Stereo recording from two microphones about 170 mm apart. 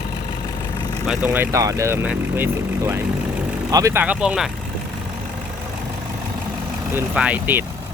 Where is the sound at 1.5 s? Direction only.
20° right (ahead or behind).